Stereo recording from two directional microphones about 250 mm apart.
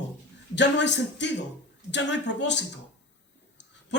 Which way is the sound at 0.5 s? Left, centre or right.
Left.